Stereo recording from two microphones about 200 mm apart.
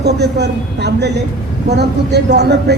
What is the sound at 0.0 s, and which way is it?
A woman's voice, 55° right (ahead or behind).